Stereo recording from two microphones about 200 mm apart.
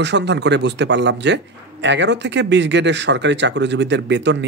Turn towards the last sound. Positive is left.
turn(degrees=-60)  # may be behind; listen again after turning